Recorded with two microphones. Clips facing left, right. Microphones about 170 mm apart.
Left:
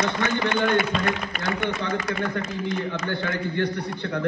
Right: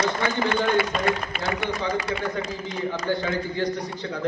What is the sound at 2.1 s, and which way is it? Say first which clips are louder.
A man's voice: even; 60° left (ahead or behind).